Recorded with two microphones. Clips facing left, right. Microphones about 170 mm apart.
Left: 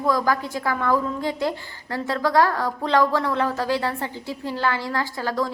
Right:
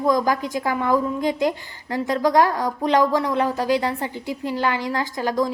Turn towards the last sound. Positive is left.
turn(degrees=-15)  # may be behind; listen again after turning